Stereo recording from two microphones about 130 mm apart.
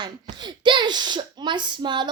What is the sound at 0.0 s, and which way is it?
A woman's voice, 35° right (ahead or behind).